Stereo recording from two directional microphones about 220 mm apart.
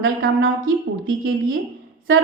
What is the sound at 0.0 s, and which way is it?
A woman's voice, 60° right (ahead or behind).